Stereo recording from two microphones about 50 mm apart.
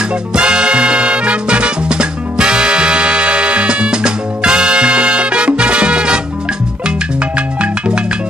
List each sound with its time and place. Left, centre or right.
0.3 s music: centre
7.3 s music: right